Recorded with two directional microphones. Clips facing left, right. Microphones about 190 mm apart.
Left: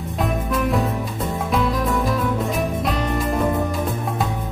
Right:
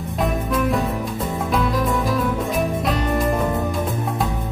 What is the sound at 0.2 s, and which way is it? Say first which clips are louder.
Music: right 1 dB; centre (ahead or behind).